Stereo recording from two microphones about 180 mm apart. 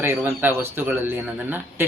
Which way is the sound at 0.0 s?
10° right (ahead or behind).